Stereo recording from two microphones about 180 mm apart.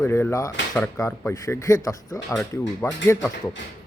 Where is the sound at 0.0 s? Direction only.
15° left (ahead or behind).